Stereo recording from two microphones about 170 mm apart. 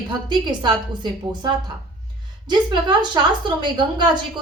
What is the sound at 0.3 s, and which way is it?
A woman's voice, 25° right (ahead or behind).